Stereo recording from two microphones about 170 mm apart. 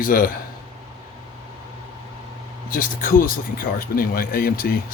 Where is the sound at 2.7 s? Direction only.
55° left (ahead or behind).